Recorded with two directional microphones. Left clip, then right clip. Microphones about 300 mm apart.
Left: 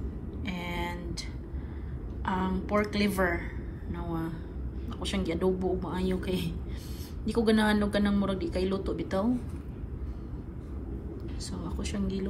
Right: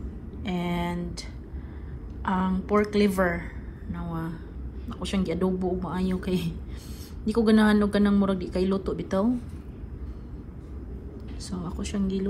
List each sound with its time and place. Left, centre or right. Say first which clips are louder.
0.4 s a sound: right 5 dB; centre
2.2 s a woman's voice: right 4 dB; centre
11.5 s a woman's voice: right 4 dB; centre